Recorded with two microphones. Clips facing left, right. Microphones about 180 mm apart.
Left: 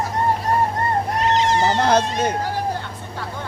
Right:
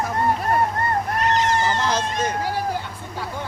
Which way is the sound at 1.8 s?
60° left (ahead or behind).